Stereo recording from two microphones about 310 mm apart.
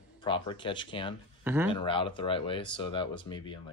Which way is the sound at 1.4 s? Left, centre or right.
Centre.